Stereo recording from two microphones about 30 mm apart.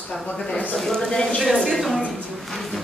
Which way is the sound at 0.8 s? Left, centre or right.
Centre.